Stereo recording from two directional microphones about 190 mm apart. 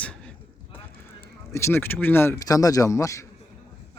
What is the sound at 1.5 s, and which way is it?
Speech, 15° left (ahead or behind).